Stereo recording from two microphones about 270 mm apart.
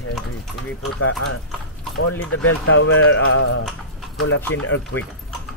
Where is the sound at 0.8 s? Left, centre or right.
Left.